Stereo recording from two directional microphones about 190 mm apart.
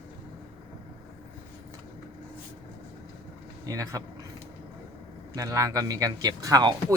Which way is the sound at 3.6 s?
15° right (ahead or behind).